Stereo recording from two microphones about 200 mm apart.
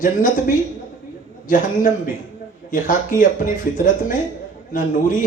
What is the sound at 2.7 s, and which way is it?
Speech, 40° left (ahead or behind).